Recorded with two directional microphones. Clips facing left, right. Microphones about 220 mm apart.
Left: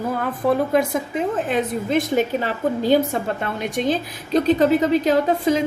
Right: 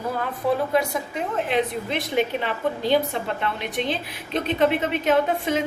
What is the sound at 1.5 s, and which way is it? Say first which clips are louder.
A woman's voice: left 4 dB; 45° left (ahead or behind).